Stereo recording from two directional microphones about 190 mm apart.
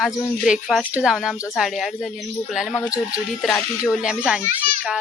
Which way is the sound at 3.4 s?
Centre (ahead or behind).